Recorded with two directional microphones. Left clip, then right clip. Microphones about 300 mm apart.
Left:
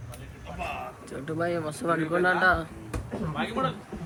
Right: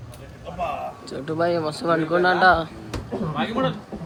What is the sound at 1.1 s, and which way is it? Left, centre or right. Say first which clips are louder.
Speech: right 7 dB; centre.